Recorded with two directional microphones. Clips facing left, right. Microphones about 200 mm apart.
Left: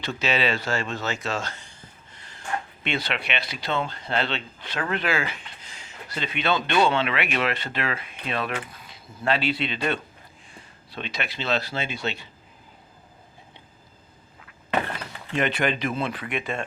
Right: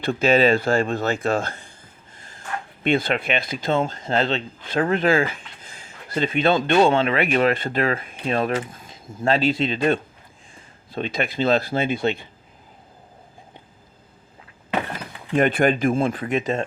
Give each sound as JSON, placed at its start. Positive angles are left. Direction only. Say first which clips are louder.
{"t": 0.0, "sound": "a man's voice", "louder": "right 8 dB", "side_deg": -55}
{"t": 2.8, "sound": "a man's voice", "louder": "right 11 dB", "side_deg": -50}
{"t": 15.4, "sound": "a man's voice", "louder": "right 6 dB", "side_deg": -50}